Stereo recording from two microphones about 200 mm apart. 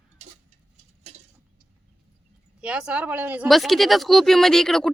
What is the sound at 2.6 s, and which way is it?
Speech, 5° right (ahead or behind).